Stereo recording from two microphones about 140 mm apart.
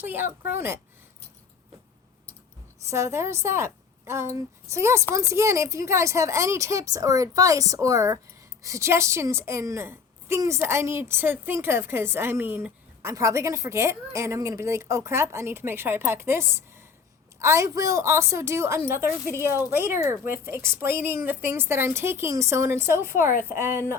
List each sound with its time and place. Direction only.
0.0 s speech: 15° right (ahead or behind)
2.9 s a woman's voice: 20° right (ahead or behind)